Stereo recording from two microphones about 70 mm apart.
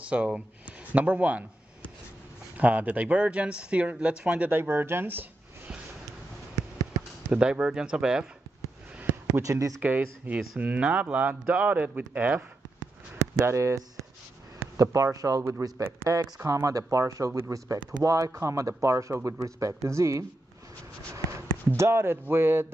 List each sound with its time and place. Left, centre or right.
0.0 s speech: centre
2.5 s speech: right
4.5 s speech: right
6.5 s a sound: right
7.3 s speech: centre
9.4 s speech: right
9.8 s speech: right
13.2 s speech: right
14.8 s speech: right
16.2 s speech: right